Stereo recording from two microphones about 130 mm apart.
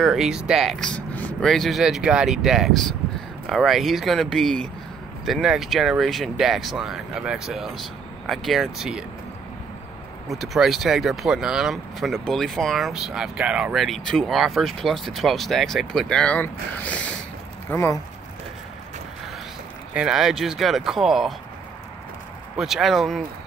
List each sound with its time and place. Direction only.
0.0 s speech: centre (ahead or behind)
10.2 s speech: centre (ahead or behind)
17.6 s speech: 20° left (ahead or behind)
19.9 s speech: 5° right (ahead or behind)
22.6 s speech: centre (ahead or behind)